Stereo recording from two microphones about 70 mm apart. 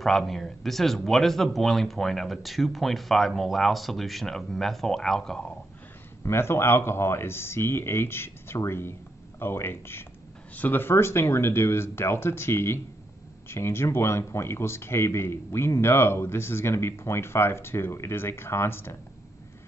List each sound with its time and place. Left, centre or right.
0.0 s speech: centre
6.2 s speech: left